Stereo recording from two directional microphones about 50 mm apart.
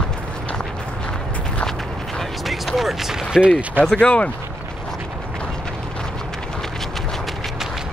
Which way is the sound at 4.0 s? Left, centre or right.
Left.